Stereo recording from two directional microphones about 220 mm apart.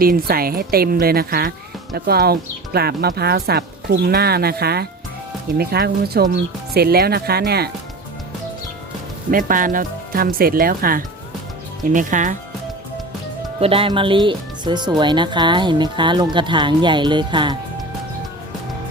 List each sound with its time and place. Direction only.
0.0 s speech: 40° right (ahead or behind)
9.3 s speech: 40° right (ahead or behind)
13.6 s speech: 25° right (ahead or behind)